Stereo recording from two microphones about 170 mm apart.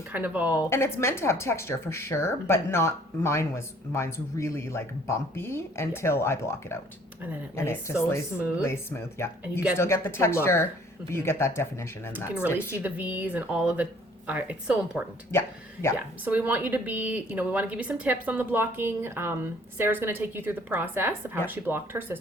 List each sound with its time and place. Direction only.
0.1 s a woman's voice: 10° right (ahead or behind)
0.7 s a woman's voice: 15° left (ahead or behind)
12.8 s a woman's voice: 10° right (ahead or behind)
15.3 s a woman's voice: 15° left (ahead or behind)
16.2 s a woman's voice: 10° right (ahead or behind)